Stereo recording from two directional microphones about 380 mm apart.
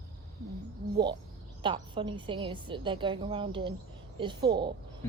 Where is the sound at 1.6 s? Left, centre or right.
Centre.